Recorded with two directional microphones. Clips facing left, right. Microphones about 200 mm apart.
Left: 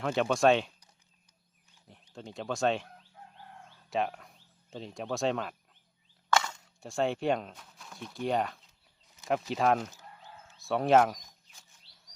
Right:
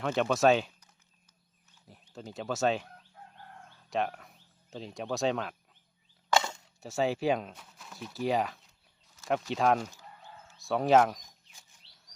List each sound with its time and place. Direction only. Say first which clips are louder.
0.0 s speech: even; centre (ahead or behind)
1.9 s chicken: right 1 dB; 5° right (ahead or behind)
6.3 s chop: right 1 dB; 25° right (ahead or behind)
6.7 s speech: right 1 dB; 5° right (ahead or behind)
10.2 s chicken: even; centre (ahead or behind)